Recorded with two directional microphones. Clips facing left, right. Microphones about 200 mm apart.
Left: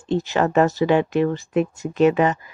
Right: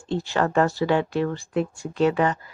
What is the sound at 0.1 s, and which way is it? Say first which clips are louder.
Speech: left 3 dB; 20° left (ahead or behind).